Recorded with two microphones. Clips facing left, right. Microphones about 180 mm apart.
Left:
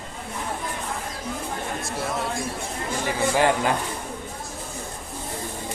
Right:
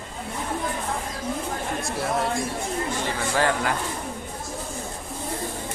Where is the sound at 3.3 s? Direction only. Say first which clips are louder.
Left 2 dB; 15° left (ahead or behind).